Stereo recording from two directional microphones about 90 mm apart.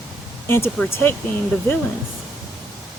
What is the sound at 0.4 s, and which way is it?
Speech, 25° left (ahead or behind).